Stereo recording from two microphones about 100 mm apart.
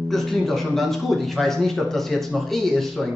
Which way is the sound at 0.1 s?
5° left (ahead or behind).